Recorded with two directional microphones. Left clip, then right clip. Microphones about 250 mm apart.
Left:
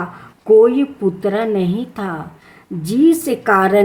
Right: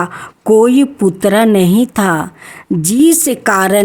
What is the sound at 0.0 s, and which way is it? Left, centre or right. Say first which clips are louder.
A woman's voice: right 9 dB; right.